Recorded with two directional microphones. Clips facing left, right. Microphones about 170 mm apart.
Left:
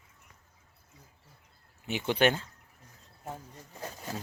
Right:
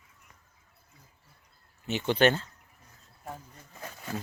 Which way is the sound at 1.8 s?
10° left (ahead or behind).